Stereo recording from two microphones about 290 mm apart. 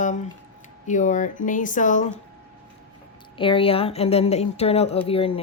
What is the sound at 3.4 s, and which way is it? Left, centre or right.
A woman's voice, centre.